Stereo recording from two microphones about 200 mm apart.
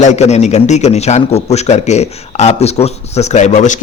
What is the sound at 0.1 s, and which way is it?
A man's voice, 35° left (ahead or behind).